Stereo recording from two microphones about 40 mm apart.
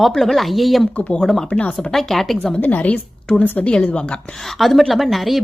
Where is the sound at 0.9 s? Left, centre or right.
Left.